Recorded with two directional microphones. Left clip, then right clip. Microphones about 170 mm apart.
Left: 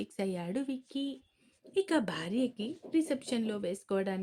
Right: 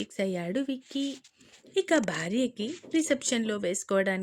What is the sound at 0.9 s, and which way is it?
A woman's voice, 40° right (ahead or behind).